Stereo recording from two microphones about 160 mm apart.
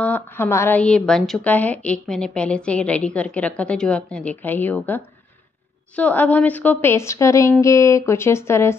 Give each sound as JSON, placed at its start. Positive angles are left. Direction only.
{"t": 0.0, "sound": "a woman's voice", "side_deg": 15}
{"t": 5.9, "sound": "a woman's voice", "side_deg": 10}